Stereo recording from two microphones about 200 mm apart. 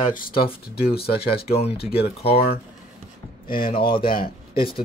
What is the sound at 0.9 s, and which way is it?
Speech, 50° left (ahead or behind).